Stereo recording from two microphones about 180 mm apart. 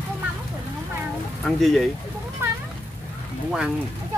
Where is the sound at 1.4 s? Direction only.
Centre (ahead or behind).